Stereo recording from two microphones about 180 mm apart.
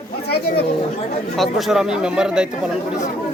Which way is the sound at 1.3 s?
Centre (ahead or behind).